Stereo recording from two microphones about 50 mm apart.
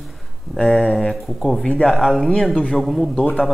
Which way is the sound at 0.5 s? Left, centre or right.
Centre.